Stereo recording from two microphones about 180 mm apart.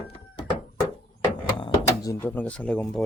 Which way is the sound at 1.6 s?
20° left (ahead or behind).